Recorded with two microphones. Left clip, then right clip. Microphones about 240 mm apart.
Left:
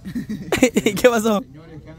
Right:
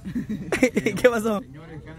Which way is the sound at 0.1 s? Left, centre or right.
Centre.